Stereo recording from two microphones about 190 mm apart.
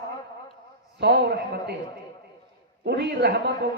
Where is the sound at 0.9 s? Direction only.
60° right (ahead or behind).